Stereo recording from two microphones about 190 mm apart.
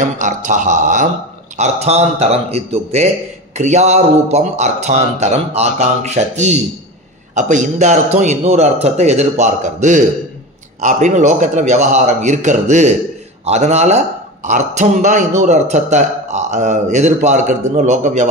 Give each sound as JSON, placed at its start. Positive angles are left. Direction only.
{"t": 0.2, "sound": "a man's voice", "side_deg": -40}